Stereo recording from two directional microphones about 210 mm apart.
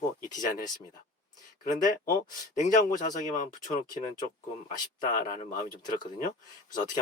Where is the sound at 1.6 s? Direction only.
40° left (ahead or behind).